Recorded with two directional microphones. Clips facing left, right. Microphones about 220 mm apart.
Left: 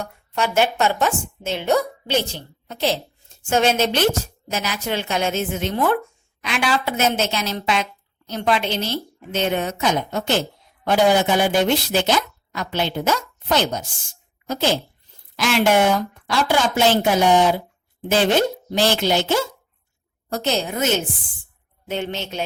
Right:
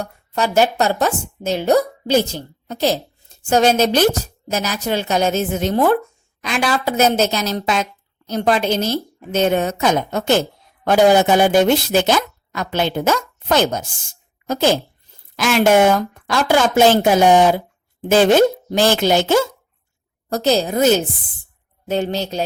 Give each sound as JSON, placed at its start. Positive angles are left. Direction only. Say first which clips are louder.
{"t": 0.0, "sound": "a woman's voice", "louder": "right 3 dB", "side_deg": -40}
{"t": 20.3, "sound": "a woman's voice", "louder": "right 6 dB", "side_deg": -35}